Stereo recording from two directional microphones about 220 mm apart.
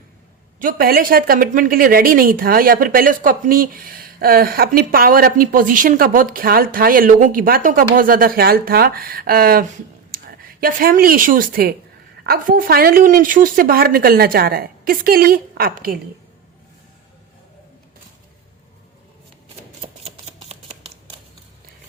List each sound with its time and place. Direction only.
0.6 s a woman's voice: 40° right (ahead or behind)
19.8 s shuffling cards: 25° right (ahead or behind)